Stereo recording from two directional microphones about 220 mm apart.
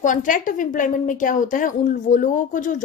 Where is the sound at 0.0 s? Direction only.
35° left (ahead or behind).